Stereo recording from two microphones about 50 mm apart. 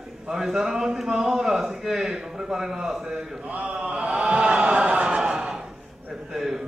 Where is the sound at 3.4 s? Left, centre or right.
Right.